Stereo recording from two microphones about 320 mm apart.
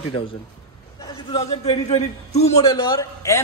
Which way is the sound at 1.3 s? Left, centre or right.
Centre.